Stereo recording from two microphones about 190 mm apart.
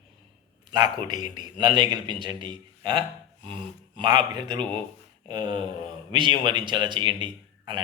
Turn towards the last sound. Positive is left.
turn(degrees=-25)  # may be behind; listen again after turning